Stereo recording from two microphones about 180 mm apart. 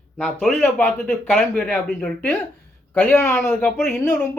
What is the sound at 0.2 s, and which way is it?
A man's voice, 10° left (ahead or behind).